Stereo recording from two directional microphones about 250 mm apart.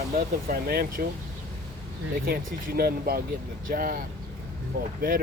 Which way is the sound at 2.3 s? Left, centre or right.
Right.